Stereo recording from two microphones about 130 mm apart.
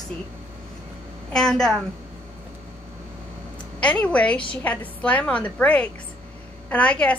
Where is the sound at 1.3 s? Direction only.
5° left (ahead or behind).